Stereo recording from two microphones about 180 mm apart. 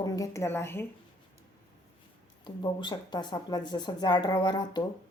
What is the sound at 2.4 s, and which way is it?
Speech, 25° left (ahead or behind).